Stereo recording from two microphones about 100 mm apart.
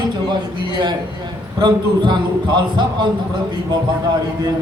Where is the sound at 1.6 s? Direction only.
45° right (ahead or behind).